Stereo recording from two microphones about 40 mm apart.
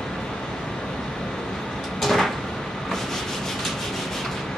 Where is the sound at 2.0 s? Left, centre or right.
Centre.